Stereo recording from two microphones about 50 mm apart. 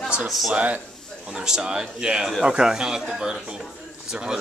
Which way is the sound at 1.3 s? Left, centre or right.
Centre.